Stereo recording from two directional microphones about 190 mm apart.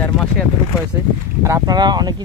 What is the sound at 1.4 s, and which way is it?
Speech, 20° right (ahead or behind).